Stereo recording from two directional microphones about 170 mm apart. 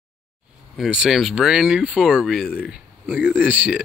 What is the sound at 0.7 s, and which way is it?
Speech, 5° right (ahead or behind).